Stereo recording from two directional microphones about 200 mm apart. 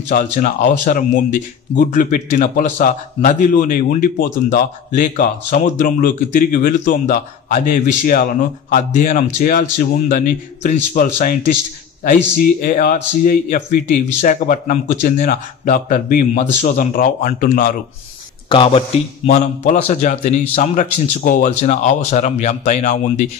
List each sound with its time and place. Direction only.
0.1 s speech: 40° left (ahead or behind)
18.5 s speech: 25° left (ahead or behind)